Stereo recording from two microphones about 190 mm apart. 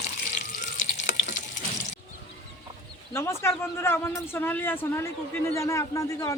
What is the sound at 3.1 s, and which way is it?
Speech, 15° left (ahead or behind).